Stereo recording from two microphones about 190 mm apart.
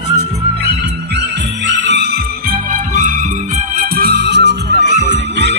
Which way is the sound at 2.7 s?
40° right (ahead or behind).